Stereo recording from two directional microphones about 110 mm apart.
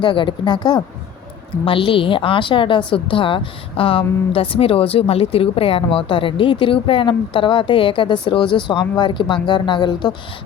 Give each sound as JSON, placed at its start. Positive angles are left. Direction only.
{"t": 0.0, "sound": "a woman's voice", "side_deg": 45}
{"t": 1.6, "sound": "a woman's voice", "side_deg": 55}